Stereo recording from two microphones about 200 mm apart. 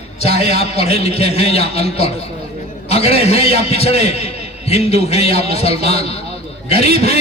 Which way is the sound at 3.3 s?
30° left (ahead or behind).